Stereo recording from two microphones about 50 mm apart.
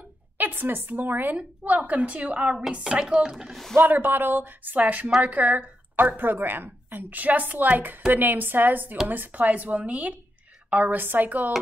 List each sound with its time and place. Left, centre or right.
0.4 s a woman's voice: right
2.9 s speech: centre
3.7 s a woman's voice: right